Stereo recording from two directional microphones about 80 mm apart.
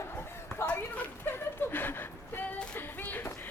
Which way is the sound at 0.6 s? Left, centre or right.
Centre.